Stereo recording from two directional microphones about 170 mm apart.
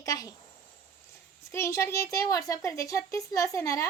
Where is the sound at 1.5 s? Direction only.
15° left (ahead or behind).